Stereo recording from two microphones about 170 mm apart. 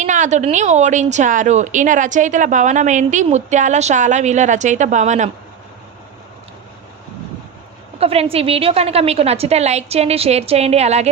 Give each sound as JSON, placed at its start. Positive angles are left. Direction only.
{"t": 0.0, "sound": "a woman's voice", "side_deg": -45}
{"t": 7.9, "sound": "a woman's voice", "side_deg": -35}